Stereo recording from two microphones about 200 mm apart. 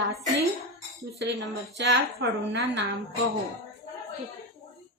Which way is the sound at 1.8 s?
60° right (ahead or behind).